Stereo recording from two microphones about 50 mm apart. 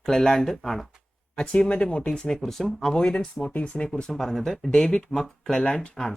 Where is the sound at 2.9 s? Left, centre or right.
Centre.